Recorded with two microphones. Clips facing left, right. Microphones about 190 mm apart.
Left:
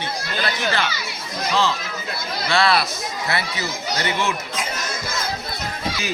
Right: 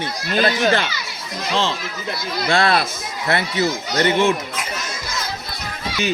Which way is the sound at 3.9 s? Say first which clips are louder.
Right 8 dB; 50° right (ahead or behind).